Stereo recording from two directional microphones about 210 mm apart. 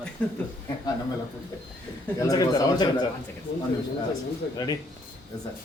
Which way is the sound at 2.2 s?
15° left (ahead or behind).